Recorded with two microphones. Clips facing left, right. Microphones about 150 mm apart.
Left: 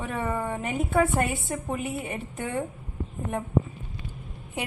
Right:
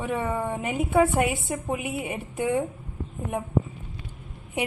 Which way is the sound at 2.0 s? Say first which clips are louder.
Right 3 dB; 5° right (ahead or behind).